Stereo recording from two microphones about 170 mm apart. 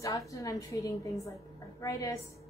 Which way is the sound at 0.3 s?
20° left (ahead or behind).